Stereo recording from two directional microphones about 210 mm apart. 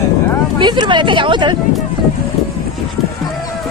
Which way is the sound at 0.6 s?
20° right (ahead or behind).